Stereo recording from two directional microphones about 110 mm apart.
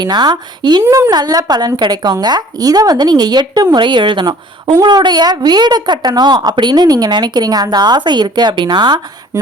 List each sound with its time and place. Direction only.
0.0 s a woman's voice: 40° right (ahead or behind)
0.9 s a woman's voice: 30° right (ahead or behind)